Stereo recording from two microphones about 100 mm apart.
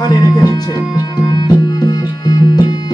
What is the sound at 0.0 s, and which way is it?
Music, 40° left (ahead or behind).